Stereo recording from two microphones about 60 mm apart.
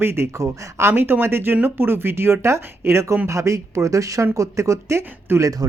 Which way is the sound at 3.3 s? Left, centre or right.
Right.